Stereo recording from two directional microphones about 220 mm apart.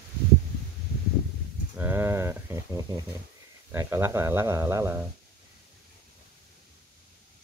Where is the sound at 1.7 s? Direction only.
10° right (ahead or behind).